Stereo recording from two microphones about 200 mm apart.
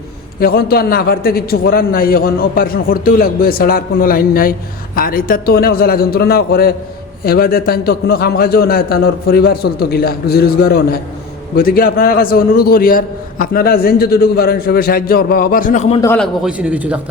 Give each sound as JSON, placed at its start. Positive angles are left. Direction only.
{"t": 0.3, "sound": "a man's voice", "side_deg": 50}
{"t": 16.1, "sound": "a man's voice", "side_deg": 0}